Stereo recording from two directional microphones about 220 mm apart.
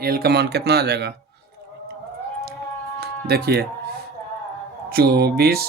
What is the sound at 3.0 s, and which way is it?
Speech, 45° right (ahead or behind).